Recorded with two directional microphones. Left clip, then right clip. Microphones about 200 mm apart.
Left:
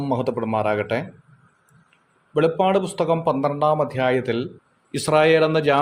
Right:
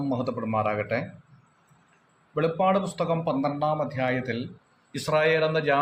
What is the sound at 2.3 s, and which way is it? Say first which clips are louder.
A man's voice: left 5 dB; 50° left (ahead or behind).